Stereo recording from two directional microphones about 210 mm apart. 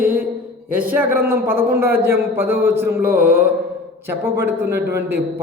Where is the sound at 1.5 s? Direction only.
45° right (ahead or behind).